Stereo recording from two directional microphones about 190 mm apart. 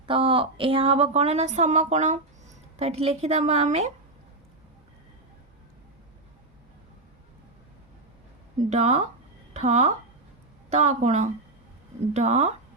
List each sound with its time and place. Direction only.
0.0 s a woman's voice: 30° right (ahead or behind)
8.7 s a woman's voice: 40° right (ahead or behind)